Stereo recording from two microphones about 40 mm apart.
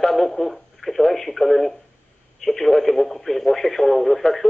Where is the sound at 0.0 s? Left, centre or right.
Centre.